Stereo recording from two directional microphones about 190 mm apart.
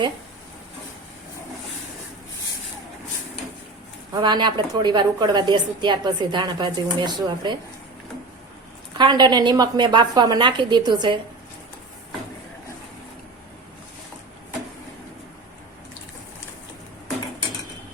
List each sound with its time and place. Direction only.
4.1 s a woman's voice: 25° right (ahead or behind)
9.0 s a woman's voice: 25° right (ahead or behind)